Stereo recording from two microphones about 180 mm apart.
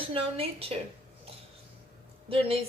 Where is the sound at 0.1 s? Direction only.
30° right (ahead or behind).